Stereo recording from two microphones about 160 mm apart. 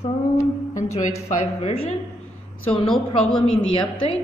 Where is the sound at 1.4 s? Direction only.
40° left (ahead or behind).